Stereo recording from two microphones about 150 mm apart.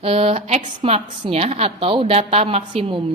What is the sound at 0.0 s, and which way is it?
A woman's voice, 40° right (ahead or behind).